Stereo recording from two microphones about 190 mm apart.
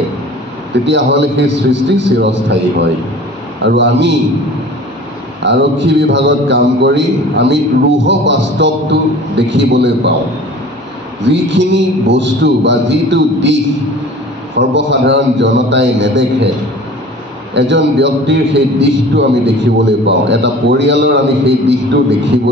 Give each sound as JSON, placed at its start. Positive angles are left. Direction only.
{"t": 0.8, "sound": "a man's voice", "side_deg": -70}
{"t": 5.4, "sound": "a man's voice", "side_deg": -70}
{"t": 11.2, "sound": "a man's voice", "side_deg": -70}
{"t": 14.6, "sound": "a man's voice", "side_deg": -70}
{"t": 17.6, "sound": "a man's voice", "side_deg": -65}